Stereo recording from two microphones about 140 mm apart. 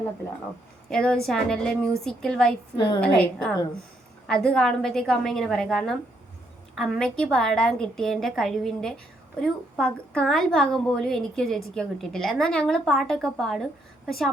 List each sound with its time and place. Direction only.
0.9 s a woman's voice: 5° left (ahead or behind)
2.7 s a woman's voice: 35° left (ahead or behind)
3.0 s a woman's voice: 5° left (ahead or behind)